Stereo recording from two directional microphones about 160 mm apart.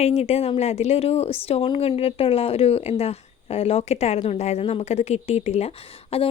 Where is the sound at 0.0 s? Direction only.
40° left (ahead or behind).